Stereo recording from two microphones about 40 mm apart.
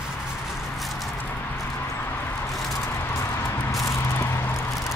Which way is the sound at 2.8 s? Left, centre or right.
Left.